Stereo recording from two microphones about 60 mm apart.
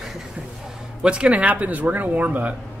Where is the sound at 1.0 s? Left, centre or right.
Centre.